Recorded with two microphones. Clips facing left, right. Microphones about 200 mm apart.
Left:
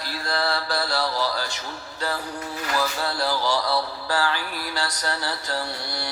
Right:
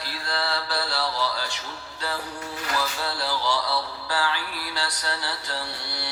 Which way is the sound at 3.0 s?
45° left (ahead or behind).